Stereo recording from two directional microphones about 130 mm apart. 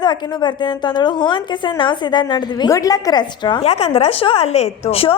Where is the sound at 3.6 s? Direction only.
55° left (ahead or behind).